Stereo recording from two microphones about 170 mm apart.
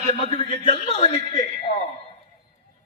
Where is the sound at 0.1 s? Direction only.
35° left (ahead or behind).